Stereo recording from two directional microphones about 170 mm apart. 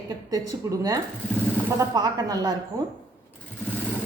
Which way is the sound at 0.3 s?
20° right (ahead or behind).